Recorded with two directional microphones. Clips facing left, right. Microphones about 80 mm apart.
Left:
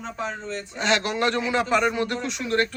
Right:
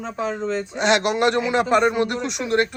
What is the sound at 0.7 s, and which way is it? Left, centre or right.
Speech, right.